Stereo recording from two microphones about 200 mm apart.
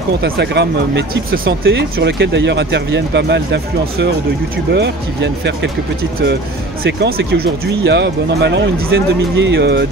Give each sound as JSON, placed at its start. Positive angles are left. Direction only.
{"t": 0.2, "sound": "speech", "side_deg": -60}
{"t": 6.8, "sound": "speech", "side_deg": -55}